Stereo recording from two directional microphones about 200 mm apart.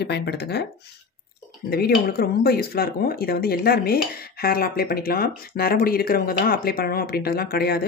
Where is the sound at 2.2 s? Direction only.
50° left (ahead or behind).